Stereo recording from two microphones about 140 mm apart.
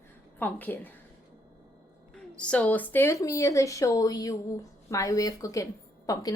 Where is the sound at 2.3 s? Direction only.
10° left (ahead or behind).